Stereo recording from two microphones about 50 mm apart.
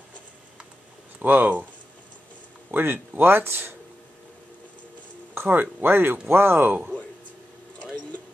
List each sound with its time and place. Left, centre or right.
1.2 s speech: right
2.7 s speech: right
5.3 s speech: right